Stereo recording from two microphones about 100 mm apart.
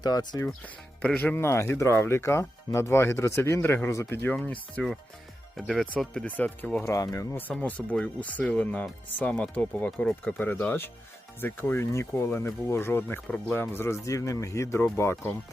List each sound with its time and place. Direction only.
0.0 s speech: 45° left (ahead or behind)
0.4 s speech: 10° left (ahead or behind)
5.5 s speech: centre (ahead or behind)
6.2 s speech: 15° left (ahead or behind)
6.8 s speech: 30° left (ahead or behind)
7.6 s speech: 15° left (ahead or behind)